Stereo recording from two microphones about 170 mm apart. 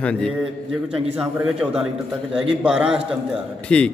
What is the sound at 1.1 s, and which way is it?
A man's voice, 5° right (ahead or behind).